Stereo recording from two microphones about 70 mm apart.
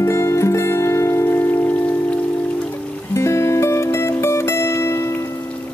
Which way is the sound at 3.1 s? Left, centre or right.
Left.